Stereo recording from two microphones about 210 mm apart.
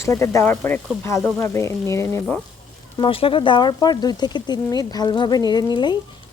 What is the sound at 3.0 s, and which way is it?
Speech, 25° left (ahead or behind).